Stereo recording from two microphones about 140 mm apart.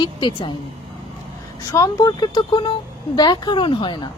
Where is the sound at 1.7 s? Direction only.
25° left (ahead or behind).